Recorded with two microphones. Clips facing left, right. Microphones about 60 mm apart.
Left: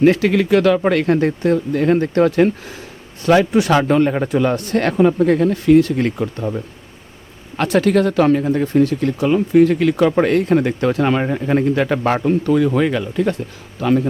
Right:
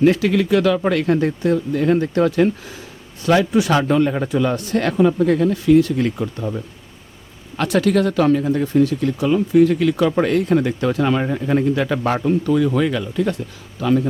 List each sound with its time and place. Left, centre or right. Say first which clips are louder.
0.0 s speech: left 2 dB; left
7.5 s speech: left 2 dB; left